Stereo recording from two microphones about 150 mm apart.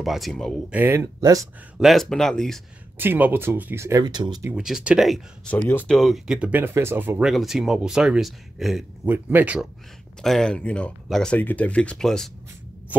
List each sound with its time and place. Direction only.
0.0 s speech: centre (ahead or behind)
0.7 s speech: 15° right (ahead or behind)
1.8 s speech: centre (ahead or behind)
3.0 s speech: 15° right (ahead or behind); by 4.4 s 30° right (ahead or behind)
4.6 s speech: 5° right (ahead or behind); by 5.9 s 10° left (ahead or behind)
5.9 s speech: centre (ahead or behind)
9.0 s speech: 10° right (ahead or behind)
10.2 s speech: 5° left (ahead or behind)